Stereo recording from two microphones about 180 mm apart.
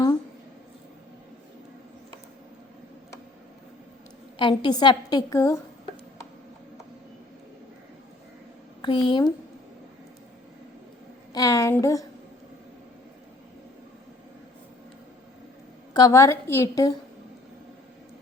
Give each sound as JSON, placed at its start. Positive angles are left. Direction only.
{"t": 4.4, "sound": "a woman's voice", "side_deg": 25}
{"t": 8.8, "sound": "speech", "side_deg": 25}
{"t": 11.3, "sound": "a woman's voice", "side_deg": 20}
{"t": 15.9, "sound": "a woman's voice", "side_deg": 20}